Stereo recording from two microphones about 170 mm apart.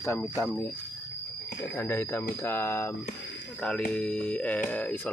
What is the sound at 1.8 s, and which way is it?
Speech, 15° left (ahead or behind).